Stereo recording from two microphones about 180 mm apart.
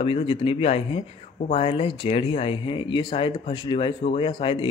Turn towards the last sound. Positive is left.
turn(degrees=30)  # may be behind; listen again after turning